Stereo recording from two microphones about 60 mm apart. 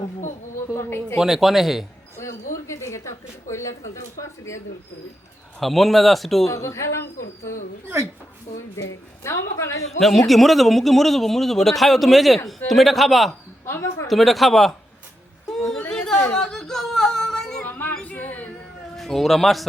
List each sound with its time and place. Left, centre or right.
0.7 s speech: left
1.2 s a man's voice: centre
2.1 s a sound: left
3.5 s a woman's voice: left
5.5 s a man's voice: centre
6.5 s a woman's voice: left
8.7 s a woman's voice: left
9.8 s a man's voice: centre
13.7 s speech: left
14.1 s a man's voice: centre
15.9 s chatter: centre
16.3 s a sound: centre
18.0 s a sound: left
18.9 s speech: centre